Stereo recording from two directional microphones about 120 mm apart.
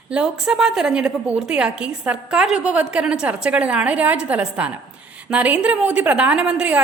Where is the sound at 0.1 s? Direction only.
5° right (ahead or behind).